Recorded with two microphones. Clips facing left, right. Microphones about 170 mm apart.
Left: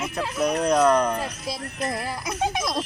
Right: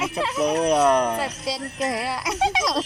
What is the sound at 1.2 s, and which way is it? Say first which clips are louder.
Speech: right 3 dB; 85° right.